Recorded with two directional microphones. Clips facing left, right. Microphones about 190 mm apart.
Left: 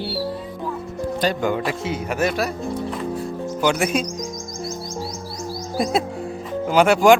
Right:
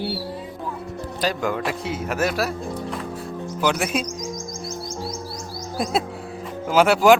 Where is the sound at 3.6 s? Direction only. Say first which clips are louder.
Left 2 dB; centre (ahead or behind).